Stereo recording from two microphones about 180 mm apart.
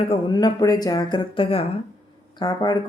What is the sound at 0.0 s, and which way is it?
Speech, 30° left (ahead or behind).